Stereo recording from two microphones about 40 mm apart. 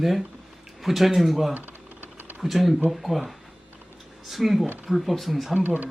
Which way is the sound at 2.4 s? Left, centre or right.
Centre.